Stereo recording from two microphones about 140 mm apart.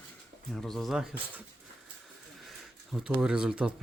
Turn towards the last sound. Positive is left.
turn(degrees=-5)  # may be behind; listen again after turning